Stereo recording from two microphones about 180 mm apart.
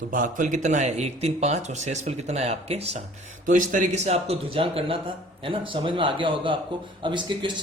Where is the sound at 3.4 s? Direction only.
45° right (ahead or behind); by 7.5 s 25° right (ahead or behind).